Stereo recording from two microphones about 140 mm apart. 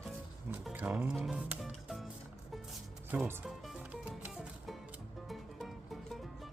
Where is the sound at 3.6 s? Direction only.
5° right (ahead or behind).